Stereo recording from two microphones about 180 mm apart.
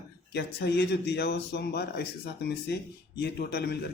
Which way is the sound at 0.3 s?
65° left (ahead or behind).